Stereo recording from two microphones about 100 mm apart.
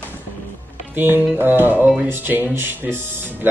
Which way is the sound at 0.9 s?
20° right (ahead or behind).